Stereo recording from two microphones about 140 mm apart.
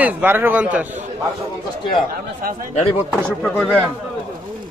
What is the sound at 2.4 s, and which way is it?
Speech, 90° right.